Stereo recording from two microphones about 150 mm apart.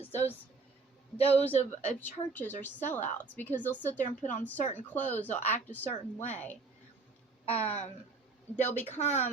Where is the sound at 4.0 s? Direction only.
55° left (ahead or behind).